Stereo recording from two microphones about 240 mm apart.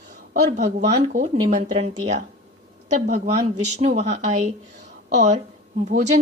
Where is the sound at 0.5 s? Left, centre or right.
Right.